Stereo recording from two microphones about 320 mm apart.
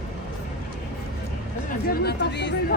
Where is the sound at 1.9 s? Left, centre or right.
Left.